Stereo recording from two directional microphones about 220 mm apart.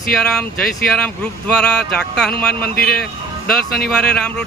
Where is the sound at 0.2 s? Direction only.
Centre (ahead or behind).